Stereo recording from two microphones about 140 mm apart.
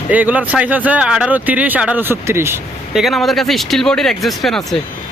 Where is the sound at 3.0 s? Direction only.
Centre (ahead or behind).